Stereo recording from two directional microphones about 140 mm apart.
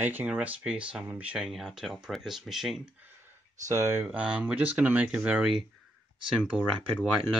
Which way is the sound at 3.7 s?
20° right (ahead or behind).